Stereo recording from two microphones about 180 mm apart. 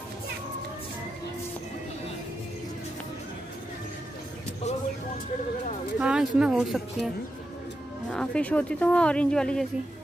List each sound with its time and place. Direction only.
5.9 s a woman's voice: 5° right (ahead or behind)
8.1 s a woman's voice: 5° left (ahead or behind)